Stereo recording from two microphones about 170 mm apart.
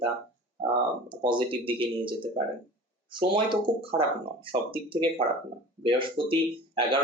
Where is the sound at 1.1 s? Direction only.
30° right (ahead or behind).